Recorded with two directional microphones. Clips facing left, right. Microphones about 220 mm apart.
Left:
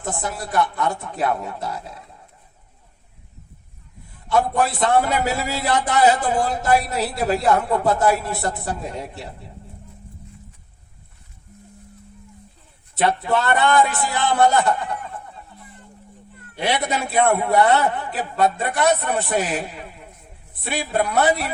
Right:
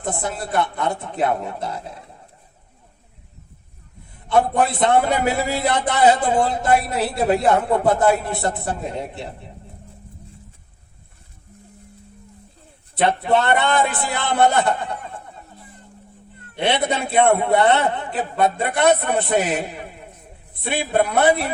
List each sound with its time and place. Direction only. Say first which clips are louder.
0.0 s a man's voice: right 2 dB; 25° right (ahead or behind)
4.3 s a man's voice: right 2 dB; 25° right (ahead or behind)
12.9 s a man's voice: right 2 dB; 25° right (ahead or behind)
16.6 s a man's voice: right 2 dB; 25° right (ahead or behind)